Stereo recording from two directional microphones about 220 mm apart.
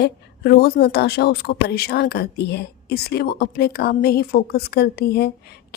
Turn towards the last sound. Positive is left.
turn(degrees=45)  # may be behind; listen again after turning